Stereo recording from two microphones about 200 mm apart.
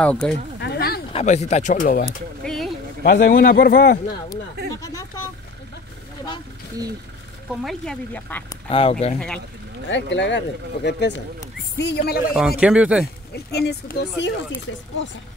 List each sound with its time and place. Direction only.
0.0 s speech: 5° left (ahead or behind)
0.6 s a sound: 55° left (ahead or behind)
1.1 s speech: 35° left (ahead or behind)
2.4 s a sound: centre (ahead or behind)
3.0 s a man's voice: 45° left (ahead or behind)
4.7 s speech: 15° left (ahead or behind)
7.6 s speech: 5° left (ahead or behind)
8.6 s speech: 30° left (ahead or behind)
9.8 s speech: 65° left (ahead or behind)
12.4 s speech: 5° right (ahead or behind)
13.3 s a man's voice: 55° left (ahead or behind)